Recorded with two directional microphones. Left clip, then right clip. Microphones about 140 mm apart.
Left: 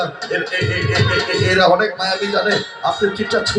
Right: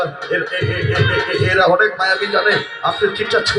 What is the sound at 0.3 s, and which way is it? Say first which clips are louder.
Speech: even; 35° left (ahead or behind).